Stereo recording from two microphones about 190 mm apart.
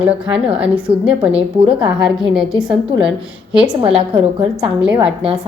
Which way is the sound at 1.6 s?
25° right (ahead or behind).